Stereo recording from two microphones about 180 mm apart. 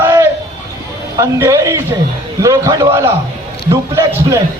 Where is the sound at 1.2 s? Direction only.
15° right (ahead or behind).